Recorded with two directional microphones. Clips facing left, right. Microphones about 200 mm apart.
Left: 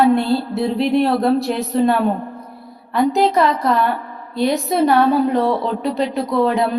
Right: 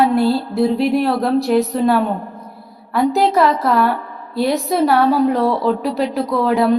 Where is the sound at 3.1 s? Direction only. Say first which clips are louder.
Right 2 dB; centre (ahead or behind).